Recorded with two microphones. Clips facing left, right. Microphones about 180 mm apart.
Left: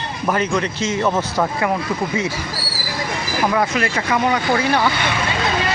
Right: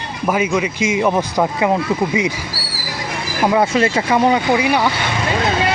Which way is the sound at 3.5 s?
25° right (ahead or behind).